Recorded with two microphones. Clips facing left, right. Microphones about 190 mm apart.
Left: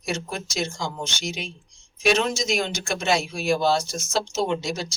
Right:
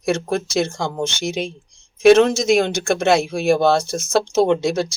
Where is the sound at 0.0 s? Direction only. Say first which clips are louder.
Right 10 dB; 60° right (ahead or behind).